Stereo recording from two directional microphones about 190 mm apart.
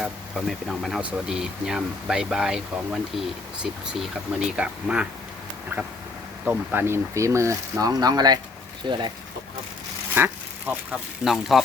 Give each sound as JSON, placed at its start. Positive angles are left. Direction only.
{"t": 0.0, "sound": "speech", "side_deg": 0}
{"t": 6.4, "sound": "speech", "side_deg": -10}
{"t": 10.2, "sound": "duck", "side_deg": -10}
{"t": 11.2, "sound": "speech", "side_deg": 0}